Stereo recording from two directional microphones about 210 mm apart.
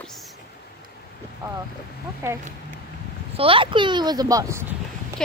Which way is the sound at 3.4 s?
25° right (ahead or behind).